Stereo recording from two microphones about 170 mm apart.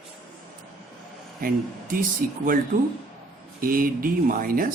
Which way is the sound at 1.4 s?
55° right (ahead or behind).